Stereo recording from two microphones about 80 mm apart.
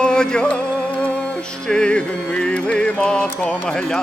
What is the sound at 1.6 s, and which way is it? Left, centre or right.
Music, centre.